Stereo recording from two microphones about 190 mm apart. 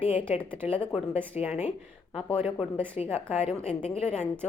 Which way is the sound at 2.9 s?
30° left (ahead or behind).